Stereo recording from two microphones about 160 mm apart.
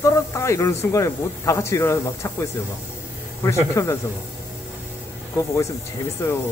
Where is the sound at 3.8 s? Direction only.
20° left (ahead or behind).